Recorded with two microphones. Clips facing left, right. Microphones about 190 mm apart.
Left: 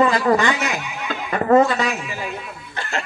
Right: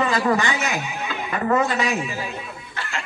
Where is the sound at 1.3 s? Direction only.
40° left (ahead or behind).